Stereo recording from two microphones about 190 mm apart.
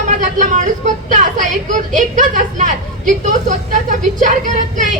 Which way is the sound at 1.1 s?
40° right (ahead or behind).